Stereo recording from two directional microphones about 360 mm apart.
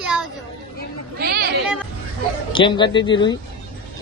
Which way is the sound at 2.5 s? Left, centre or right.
Centre.